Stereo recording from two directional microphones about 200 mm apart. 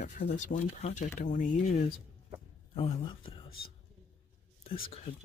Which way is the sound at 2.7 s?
30° left (ahead or behind).